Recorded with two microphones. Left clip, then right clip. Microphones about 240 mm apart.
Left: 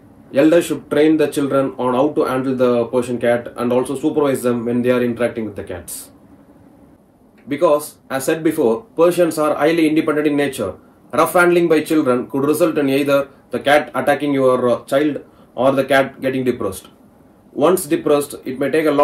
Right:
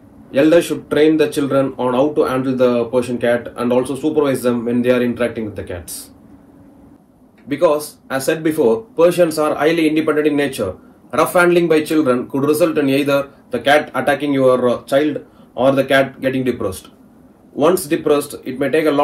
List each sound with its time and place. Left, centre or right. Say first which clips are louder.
0.3 s a man's voice: right 1 dB; centre
4.0 s speech: right 1 dB; centre
7.4 s a man's voice: even; centre